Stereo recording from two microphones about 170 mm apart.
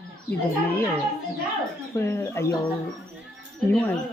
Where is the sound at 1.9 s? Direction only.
15° left (ahead or behind).